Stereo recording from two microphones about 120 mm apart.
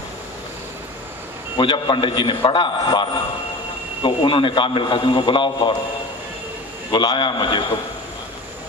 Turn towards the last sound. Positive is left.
turn(degrees=40)  # may be behind; listen again after turning